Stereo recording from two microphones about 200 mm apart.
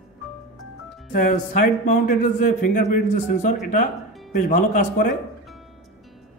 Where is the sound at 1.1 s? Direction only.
40° left (ahead or behind).